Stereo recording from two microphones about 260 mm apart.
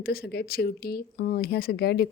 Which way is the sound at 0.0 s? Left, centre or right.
Left.